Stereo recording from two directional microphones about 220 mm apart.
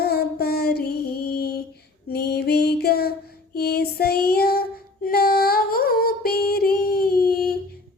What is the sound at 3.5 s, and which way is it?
Female singing, 45° left (ahead or behind).